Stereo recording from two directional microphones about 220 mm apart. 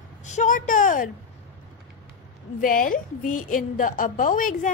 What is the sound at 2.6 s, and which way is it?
A woman's voice, 40° left (ahead or behind).